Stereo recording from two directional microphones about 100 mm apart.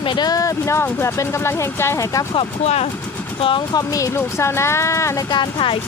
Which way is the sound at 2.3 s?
80° left.